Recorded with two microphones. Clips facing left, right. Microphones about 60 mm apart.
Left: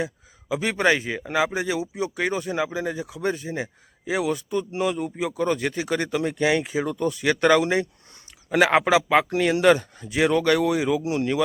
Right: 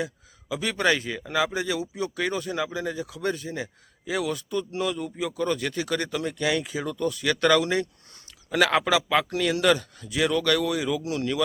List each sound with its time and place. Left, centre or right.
0.0 s speech: left